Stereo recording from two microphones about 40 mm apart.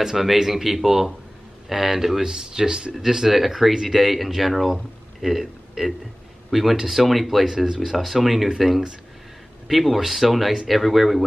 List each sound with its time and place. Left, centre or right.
0.0 s speech: centre
2.2 s a man's voice: centre
7.5 s speech: centre